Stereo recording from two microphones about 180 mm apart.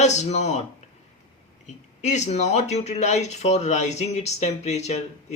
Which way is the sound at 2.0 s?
40° left (ahead or behind).